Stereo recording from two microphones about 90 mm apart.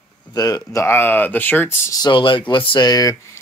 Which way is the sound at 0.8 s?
20° left (ahead or behind).